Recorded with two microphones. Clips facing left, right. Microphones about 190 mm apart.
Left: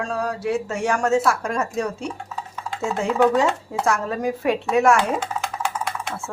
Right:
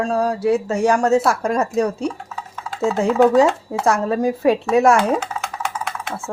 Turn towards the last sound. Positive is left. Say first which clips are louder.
# right 1 dB
turn(degrees=0)  # may be behind; listen again after turning